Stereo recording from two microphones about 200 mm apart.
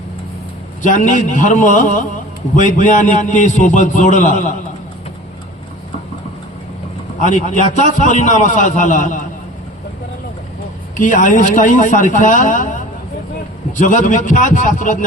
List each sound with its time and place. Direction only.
0.8 s a man's voice: 40° left (ahead or behind)
7.2 s a man's voice: 40° left (ahead or behind)
10.9 s a man's voice: 40° left (ahead or behind)